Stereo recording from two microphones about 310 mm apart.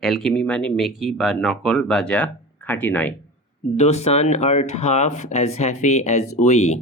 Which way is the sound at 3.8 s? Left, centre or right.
Left.